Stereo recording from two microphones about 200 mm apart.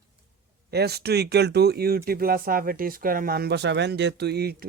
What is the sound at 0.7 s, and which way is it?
Speech, 55° right (ahead or behind).